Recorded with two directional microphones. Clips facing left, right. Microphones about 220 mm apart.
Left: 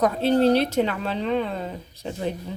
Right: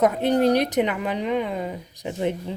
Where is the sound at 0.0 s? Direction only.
15° right (ahead or behind).